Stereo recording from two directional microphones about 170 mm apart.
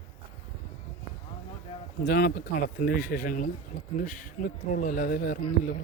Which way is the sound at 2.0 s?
65° left (ahead or behind).